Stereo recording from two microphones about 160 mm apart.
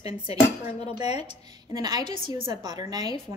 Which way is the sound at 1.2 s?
25° right (ahead or behind).